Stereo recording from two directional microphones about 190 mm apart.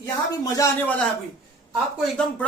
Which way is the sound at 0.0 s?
15° left (ahead or behind).